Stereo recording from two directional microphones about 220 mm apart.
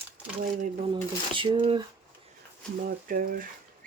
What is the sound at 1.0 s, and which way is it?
Speech, 25° right (ahead or behind).